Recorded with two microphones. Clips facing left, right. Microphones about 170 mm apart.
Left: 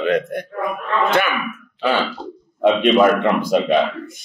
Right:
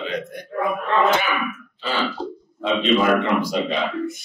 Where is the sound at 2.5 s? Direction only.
55° left (ahead or behind).